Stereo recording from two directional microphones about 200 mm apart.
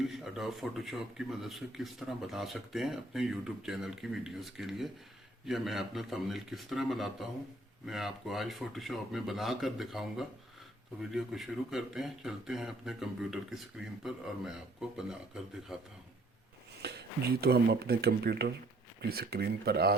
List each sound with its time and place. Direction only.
0.1 s a man's voice: centre (ahead or behind)
16.8 s speech: 55° right (ahead or behind)